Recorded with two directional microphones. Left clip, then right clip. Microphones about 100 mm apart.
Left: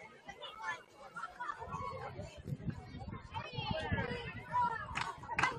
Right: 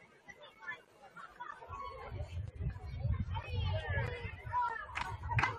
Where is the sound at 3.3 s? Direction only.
10° right (ahead or behind).